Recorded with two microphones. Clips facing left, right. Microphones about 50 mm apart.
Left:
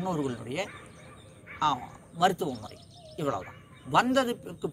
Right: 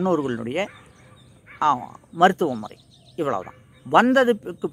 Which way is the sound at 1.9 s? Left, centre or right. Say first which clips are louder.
Right 8 dB; right.